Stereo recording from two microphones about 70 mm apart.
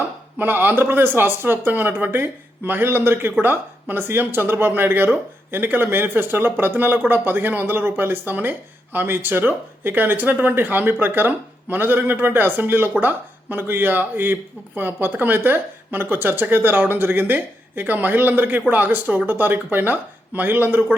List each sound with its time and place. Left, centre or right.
0.3 s speech: right